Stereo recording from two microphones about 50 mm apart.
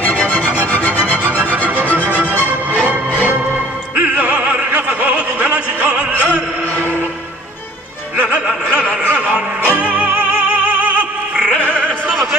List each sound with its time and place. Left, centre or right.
0.0 s music: left
1.2 s music: right
1.9 s music: left
2.1 s music: right
3.9 s opera: right
8.2 s music: right
11.3 s music: centre